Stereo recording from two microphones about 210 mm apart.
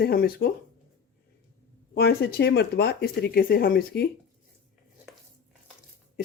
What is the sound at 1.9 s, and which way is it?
Speech, 50° left (ahead or behind).